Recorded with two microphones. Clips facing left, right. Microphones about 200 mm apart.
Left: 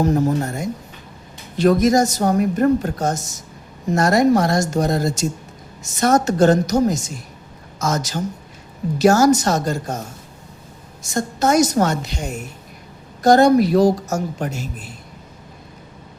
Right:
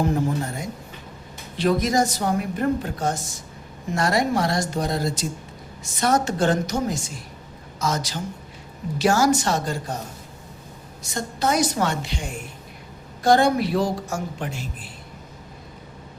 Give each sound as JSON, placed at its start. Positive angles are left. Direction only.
{"t": 0.0, "sound": "a woman's voice", "side_deg": 40}
{"t": 11.0, "sound": "a woman's voice", "side_deg": 45}